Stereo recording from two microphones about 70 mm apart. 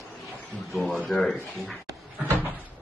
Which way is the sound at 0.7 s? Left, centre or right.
Centre.